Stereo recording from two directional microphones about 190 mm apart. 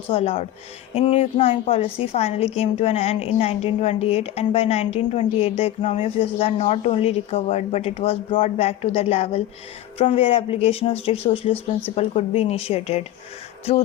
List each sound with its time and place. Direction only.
0.1 s a woman's voice: 30° left (ahead or behind)